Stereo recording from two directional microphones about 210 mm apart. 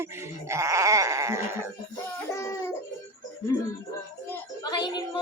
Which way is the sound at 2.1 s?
15° left (ahead or behind).